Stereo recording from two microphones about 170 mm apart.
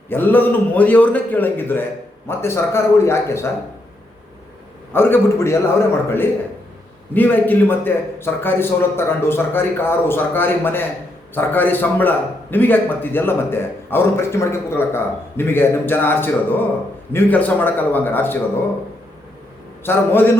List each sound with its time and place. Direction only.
0.1 s a man's voice: 10° left (ahead or behind)
4.9 s a man's voice: 15° left (ahead or behind)
19.8 s a man's voice: 15° left (ahead or behind)